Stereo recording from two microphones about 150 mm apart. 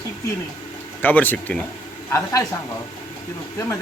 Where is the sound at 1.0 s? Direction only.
10° left (ahead or behind).